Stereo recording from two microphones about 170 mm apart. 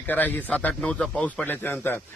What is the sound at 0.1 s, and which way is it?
A man's voice, 10° left (ahead or behind).